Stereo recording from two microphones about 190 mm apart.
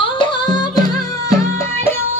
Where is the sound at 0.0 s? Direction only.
25° left (ahead or behind).